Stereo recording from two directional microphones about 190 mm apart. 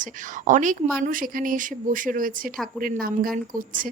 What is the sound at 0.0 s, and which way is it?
Speech, 40° right (ahead or behind).